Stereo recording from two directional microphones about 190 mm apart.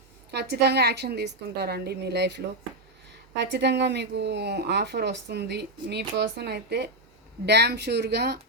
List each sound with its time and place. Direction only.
0.3 s a woman's voice: 60° right (ahead or behind)